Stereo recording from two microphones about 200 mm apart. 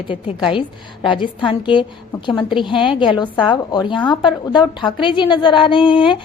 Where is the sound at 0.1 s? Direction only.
25° left (ahead or behind).